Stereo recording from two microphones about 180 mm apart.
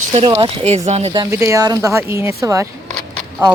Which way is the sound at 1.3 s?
15° right (ahead or behind).